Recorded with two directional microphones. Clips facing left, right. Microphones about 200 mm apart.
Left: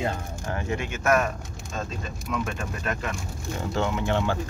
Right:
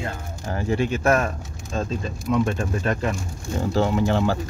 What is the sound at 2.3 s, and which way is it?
Speech, 30° right (ahead or behind).